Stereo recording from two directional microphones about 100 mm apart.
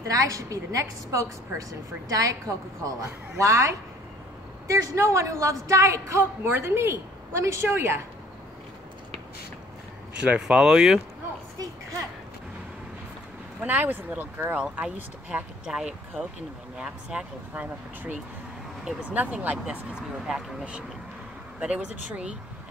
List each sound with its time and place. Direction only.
0.0 s a woman's voice: 35° right (ahead or behind)
10.2 s speech: 10° right (ahead or behind)
13.7 s speech: 20° right (ahead or behind)